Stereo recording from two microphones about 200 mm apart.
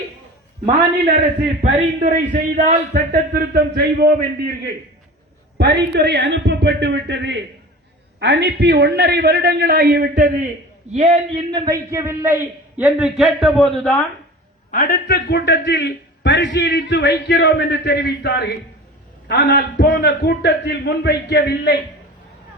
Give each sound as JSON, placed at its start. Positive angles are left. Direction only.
{"t": 1.6, "sound": "a man's voice", "side_deg": -30}
{"t": 10.9, "sound": "a man's voice", "side_deg": -30}
{"t": 14.7, "sound": "a man's voice", "side_deg": 45}